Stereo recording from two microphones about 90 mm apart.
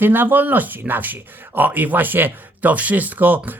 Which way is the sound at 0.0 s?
20° right (ahead or behind).